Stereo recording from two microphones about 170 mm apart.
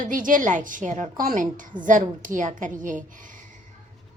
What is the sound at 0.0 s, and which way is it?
A woman's voice, 50° right (ahead or behind).